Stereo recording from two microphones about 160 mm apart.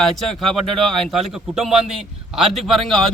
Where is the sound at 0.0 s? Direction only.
Centre (ahead or behind).